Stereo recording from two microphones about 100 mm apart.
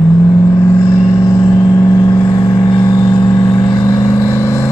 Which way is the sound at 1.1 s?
35° left (ahead or behind).